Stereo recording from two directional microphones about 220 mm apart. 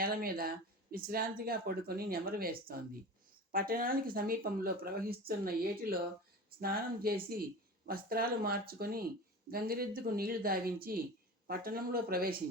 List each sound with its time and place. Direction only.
0.0 s speech: 40° right (ahead or behind)
6.6 s a woman's voice: 45° right (ahead or behind)